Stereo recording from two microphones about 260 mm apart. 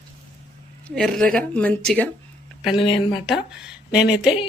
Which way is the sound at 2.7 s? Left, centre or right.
Centre.